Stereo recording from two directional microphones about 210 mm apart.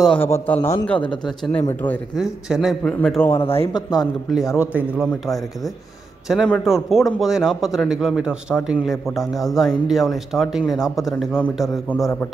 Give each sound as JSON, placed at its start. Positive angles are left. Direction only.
{"t": 0.0, "sound": "a man's voice", "side_deg": 5}
{"t": 3.3, "sound": "speech", "side_deg": 25}
{"t": 4.6, "sound": "a man's voice", "side_deg": -5}
{"t": 6.2, "sound": "a man's voice", "side_deg": 0}